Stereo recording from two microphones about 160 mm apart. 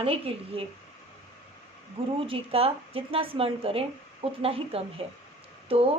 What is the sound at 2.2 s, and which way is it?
Speech, 35° right (ahead or behind).